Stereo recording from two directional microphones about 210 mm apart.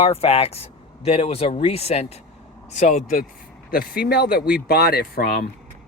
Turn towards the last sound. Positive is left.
turn(degrees=45)  # may be behind; listen again after turning